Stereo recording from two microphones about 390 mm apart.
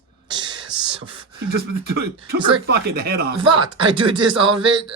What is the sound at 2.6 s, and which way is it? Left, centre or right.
Speech, right.